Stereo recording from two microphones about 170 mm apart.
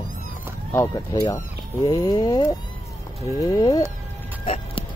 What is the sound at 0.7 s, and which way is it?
Speech, 20° left (ahead or behind).